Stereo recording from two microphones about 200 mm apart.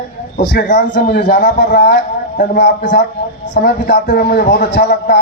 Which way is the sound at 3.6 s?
45° left (ahead or behind).